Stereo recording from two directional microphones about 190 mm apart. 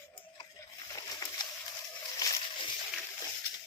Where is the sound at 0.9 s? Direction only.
20° left (ahead or behind).